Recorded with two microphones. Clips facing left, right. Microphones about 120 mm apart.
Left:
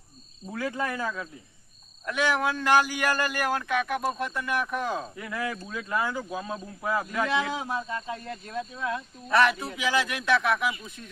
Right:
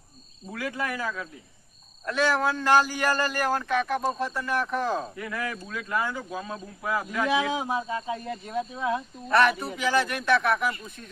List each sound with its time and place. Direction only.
0.5 s speech: 25° left (ahead or behind)
2.0 s speech: 5° left (ahead or behind)
5.1 s speech: 15° left (ahead or behind)
7.3 s speech: 10° right (ahead or behind)
9.3 s speech: centre (ahead or behind)